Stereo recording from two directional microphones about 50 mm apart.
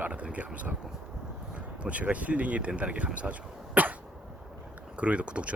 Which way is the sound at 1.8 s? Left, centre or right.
Right.